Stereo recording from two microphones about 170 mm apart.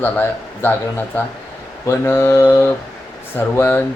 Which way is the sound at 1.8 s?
15° left (ahead or behind).